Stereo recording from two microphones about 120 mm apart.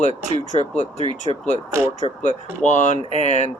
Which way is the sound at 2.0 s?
70° left (ahead or behind).